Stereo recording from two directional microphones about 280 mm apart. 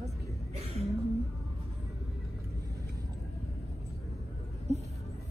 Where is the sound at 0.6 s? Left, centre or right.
Right.